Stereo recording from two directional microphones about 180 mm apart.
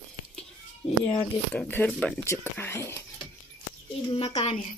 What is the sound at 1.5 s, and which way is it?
Speech, 10° left (ahead or behind).